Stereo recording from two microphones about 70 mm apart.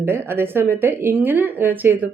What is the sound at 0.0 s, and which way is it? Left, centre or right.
A woman's voice, right.